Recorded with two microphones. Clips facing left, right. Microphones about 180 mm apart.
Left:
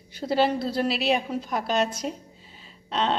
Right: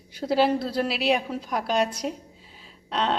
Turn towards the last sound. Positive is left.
turn(degrees=-5)  # may be behind; listen again after turning